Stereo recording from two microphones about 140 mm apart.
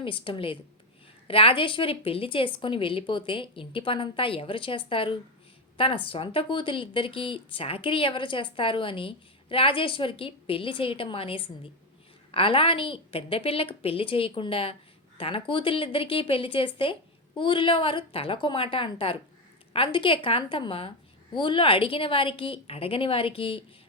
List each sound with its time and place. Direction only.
0.0 s a woman's voice: 40° left (ahead or behind)